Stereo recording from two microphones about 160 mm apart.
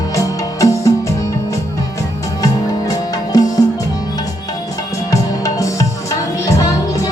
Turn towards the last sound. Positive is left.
turn(degrees=20)  # may be behind; listen again after turning